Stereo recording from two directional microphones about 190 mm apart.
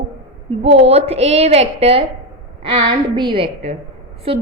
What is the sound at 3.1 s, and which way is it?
A woman's voice, 25° right (ahead or behind).